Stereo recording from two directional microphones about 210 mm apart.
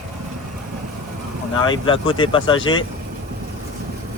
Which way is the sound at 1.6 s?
20° left (ahead or behind).